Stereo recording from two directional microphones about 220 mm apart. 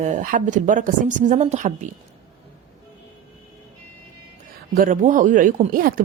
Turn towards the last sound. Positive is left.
turn(degrees=-40)  # may be behind; listen again after turning